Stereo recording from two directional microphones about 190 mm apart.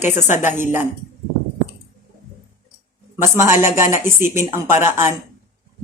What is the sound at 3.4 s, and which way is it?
Speech, 15° right (ahead or behind).